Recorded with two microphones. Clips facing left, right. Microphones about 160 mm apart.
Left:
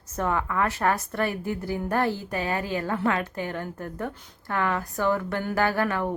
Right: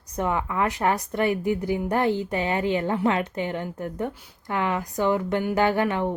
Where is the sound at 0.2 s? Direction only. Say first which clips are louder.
Right 1 dB; 15° right (ahead or behind).